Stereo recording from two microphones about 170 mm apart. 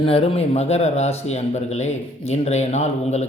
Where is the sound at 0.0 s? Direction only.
35° left (ahead or behind).